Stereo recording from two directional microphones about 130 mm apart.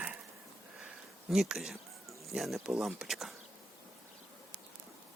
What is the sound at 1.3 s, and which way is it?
Speech, centre (ahead or behind).